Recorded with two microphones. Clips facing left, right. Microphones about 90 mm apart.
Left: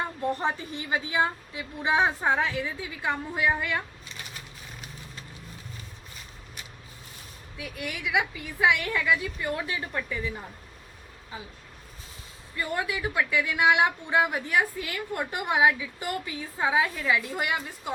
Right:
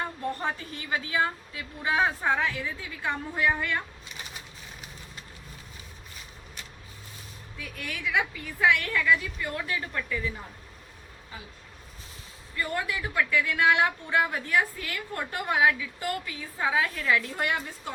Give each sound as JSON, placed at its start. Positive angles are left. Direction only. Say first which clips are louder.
{"t": 0.2, "sound": "a woman's voice", "louder": "left 3 dB", "side_deg": 20}
{"t": 7.6, "sound": "a woman's voice", "louder": "left 1 dB", "side_deg": 15}
{"t": 12.5, "sound": "a woman's voice", "louder": "left 1 dB", "side_deg": 15}